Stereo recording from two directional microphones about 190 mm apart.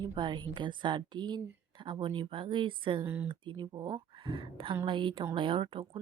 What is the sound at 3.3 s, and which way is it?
A woman's voice, 25° right (ahead or behind).